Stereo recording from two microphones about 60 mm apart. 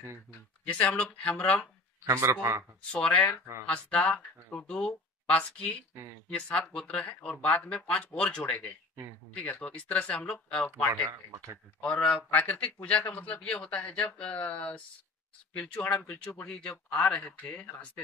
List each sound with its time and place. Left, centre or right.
0.7 s speech: left
2.0 s speech: right
2.9 s speech: left
10.9 s speech: right
11.5 s speech: centre
16.4 s speech: centre